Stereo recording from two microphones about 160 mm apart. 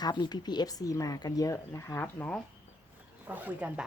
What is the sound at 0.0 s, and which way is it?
Speech, 25° left (ahead or behind).